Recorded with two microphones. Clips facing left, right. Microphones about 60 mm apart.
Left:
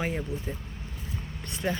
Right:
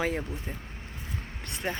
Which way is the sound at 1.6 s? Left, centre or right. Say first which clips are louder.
Left 3 dB; right.